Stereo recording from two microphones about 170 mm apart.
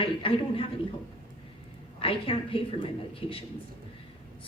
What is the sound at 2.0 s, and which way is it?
A woman's voice, 35° left (ahead or behind).